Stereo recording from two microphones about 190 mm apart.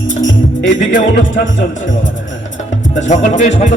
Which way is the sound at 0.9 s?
70° left (ahead or behind).